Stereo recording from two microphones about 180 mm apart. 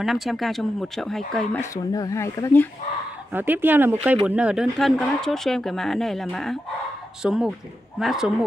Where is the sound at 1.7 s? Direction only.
20° left (ahead or behind).